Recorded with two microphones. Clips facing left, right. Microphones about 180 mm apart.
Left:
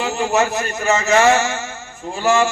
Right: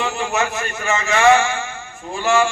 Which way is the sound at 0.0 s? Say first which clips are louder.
Left 3 dB; 40° left (ahead or behind).